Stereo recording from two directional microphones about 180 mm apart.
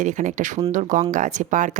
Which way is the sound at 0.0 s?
45° right (ahead or behind).